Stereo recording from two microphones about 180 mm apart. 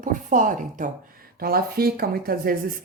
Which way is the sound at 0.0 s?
45° right (ahead or behind).